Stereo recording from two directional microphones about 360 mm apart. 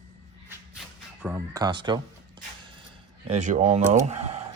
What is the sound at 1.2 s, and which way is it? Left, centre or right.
Speech, centre.